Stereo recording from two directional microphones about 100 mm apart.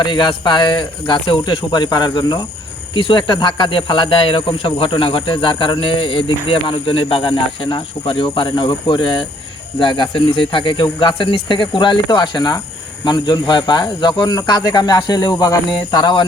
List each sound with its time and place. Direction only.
0.0 s speech: 50° left (ahead or behind)